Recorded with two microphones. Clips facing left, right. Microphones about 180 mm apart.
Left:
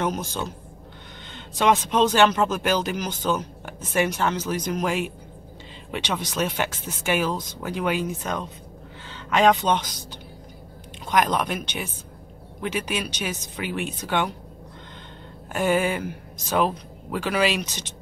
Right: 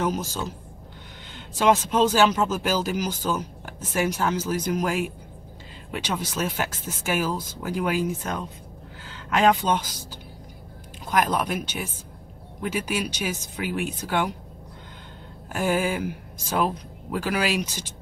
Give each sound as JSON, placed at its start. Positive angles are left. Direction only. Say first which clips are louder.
{"t": 0.0, "sound": "speech", "louder": "even", "side_deg": -5}
{"t": 9.0, "sound": "speech", "louder": "left 1 dB", "side_deg": -5}
{"t": 11.1, "sound": "speech", "louder": "left 1 dB", "side_deg": -5}
{"t": 15.5, "sound": "speech", "louder": "left 2 dB", "side_deg": -5}